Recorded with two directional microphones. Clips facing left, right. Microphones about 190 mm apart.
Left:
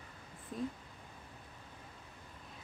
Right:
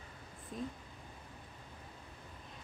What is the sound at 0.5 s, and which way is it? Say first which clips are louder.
Speech: left 3 dB; centre (ahead or behind).